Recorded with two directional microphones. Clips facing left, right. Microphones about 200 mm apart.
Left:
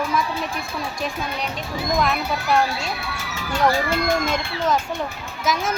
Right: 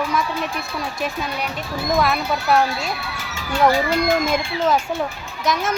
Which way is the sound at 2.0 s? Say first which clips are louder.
Right 2 dB; 5° right (ahead or behind).